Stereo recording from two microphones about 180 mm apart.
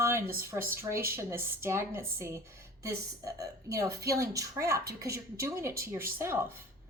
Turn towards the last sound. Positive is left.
turn(degrees=-10)  # may be behind; listen again after turning